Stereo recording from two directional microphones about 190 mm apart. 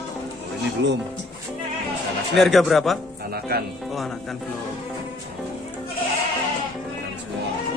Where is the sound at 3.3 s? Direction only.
55° right (ahead or behind).